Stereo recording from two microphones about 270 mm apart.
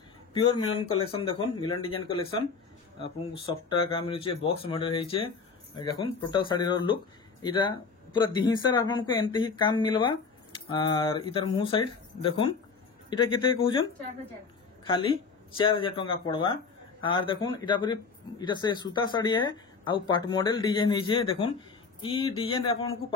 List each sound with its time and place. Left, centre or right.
0.3 s speech: centre
3.9 s speech: centre
15.5 s speech: centre